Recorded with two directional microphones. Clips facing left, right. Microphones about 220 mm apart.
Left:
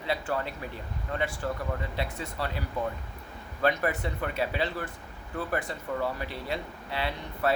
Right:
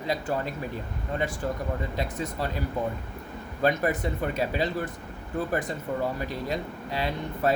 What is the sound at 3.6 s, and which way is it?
Speech, 40° right (ahead or behind).